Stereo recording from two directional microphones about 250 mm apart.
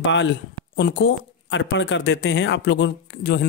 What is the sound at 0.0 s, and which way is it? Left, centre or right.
Speech, left.